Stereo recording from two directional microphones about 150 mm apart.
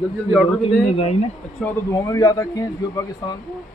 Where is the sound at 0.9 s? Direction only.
40° left (ahead or behind).